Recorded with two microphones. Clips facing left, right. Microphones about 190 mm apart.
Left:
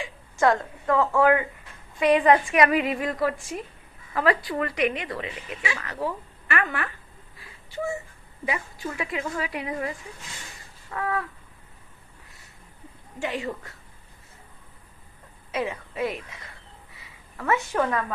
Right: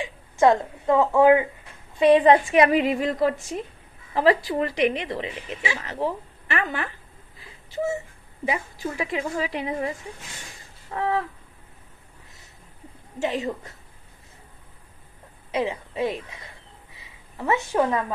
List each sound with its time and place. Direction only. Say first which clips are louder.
0.0 s a woman's voice: right 4 dB; 20° right (ahead or behind)
8.4 s speech: right 3 dB; 30° right (ahead or behind)
10.9 s a sound: right 4 dB; 25° right (ahead or behind)
13.2 s speech: right 3 dB; 20° right (ahead or behind)
15.5 s a woman's voice: right 3 dB; 20° right (ahead or behind)